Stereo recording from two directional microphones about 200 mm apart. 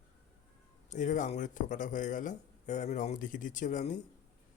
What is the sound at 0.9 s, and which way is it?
Speech, 40° left (ahead or behind).